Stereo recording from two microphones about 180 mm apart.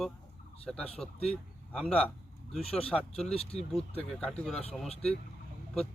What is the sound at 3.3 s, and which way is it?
Speech, 35° left (ahead or behind).